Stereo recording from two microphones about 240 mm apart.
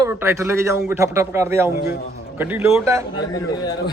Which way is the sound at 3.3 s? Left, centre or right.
Centre.